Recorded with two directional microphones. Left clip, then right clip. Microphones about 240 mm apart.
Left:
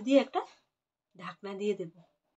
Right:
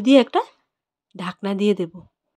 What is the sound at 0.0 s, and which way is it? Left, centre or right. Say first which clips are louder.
Speech: right 11 dB; right.